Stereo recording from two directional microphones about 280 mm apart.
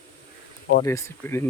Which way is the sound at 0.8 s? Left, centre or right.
Centre.